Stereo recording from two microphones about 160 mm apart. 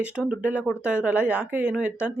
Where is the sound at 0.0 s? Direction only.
5° right (ahead or behind).